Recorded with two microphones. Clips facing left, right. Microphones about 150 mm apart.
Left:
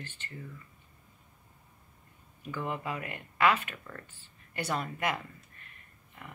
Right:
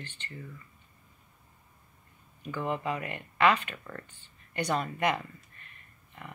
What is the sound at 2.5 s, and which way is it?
Speech, 20° right (ahead or behind).